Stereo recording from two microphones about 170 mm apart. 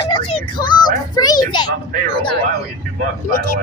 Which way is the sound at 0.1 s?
25° left (ahead or behind).